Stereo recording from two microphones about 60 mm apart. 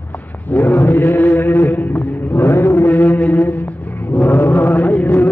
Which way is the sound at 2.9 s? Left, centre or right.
Left.